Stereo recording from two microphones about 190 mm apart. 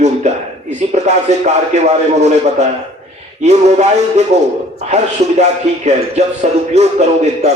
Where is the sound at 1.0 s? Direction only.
35° right (ahead or behind).